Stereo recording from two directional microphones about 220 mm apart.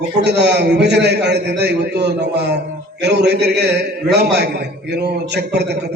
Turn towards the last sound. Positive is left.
turn(degrees=-50)  # may be behind; listen again after turning